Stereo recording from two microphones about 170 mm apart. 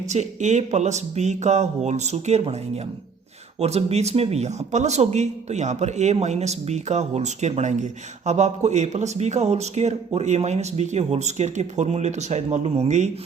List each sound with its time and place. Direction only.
0.1 s speech: 45° right (ahead or behind)
3.6 s speech: 40° right (ahead or behind)